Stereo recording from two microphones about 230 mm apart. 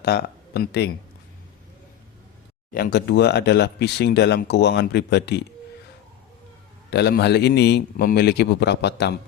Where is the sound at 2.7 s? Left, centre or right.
Left.